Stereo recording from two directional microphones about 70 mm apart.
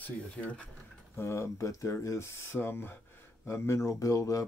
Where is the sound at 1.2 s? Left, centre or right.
Left.